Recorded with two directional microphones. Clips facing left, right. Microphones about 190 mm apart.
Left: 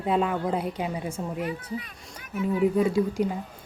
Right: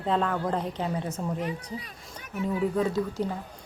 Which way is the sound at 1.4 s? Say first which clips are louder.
Left 2 dB; 35° right (ahead or behind).